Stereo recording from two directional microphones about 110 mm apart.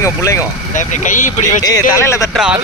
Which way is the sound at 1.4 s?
30° left (ahead or behind).